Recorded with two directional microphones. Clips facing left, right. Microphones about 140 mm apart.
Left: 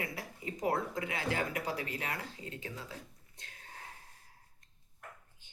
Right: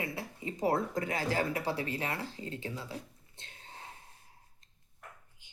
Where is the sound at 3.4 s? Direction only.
25° right (ahead or behind).